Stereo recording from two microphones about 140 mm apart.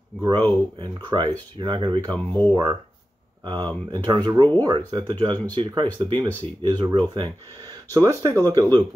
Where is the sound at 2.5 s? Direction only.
35° right (ahead or behind).